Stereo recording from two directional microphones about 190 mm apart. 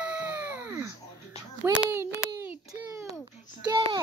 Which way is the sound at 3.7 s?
25° right (ahead or behind).